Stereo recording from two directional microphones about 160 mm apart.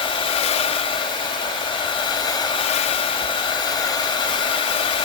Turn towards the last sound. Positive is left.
turn(degrees=30)  # may be behind; listen again after turning